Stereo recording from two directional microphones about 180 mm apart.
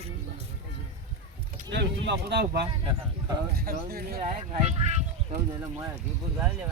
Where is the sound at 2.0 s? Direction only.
70° right (ahead or behind).